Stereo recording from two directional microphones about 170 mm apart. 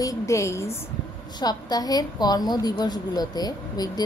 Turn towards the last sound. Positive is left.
turn(degrees=25)  # may be behind; listen again after turning